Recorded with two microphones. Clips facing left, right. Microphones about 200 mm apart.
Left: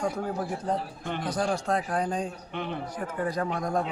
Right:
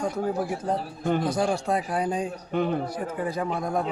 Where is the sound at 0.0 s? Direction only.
5° right (ahead or behind).